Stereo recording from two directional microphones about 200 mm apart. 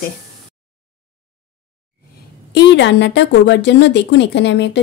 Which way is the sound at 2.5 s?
60° left (ahead or behind).